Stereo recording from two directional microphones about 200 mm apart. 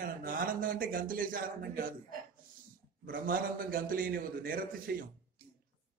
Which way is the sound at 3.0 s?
45° right (ahead or behind).